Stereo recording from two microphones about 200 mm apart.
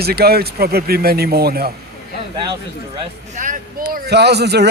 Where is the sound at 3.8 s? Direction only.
50° right (ahead or behind).